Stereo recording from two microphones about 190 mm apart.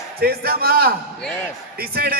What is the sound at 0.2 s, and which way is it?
A man's voice, 55° right (ahead or behind).